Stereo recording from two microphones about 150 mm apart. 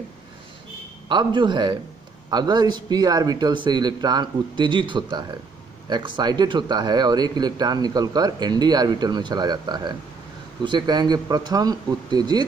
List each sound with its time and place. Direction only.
1.0 s a man's voice: 30° right (ahead or behind)